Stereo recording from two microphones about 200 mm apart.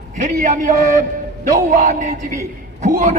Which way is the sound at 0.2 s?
40° right (ahead or behind).